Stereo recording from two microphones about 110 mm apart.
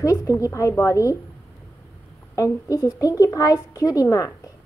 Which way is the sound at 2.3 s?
30° left (ahead or behind).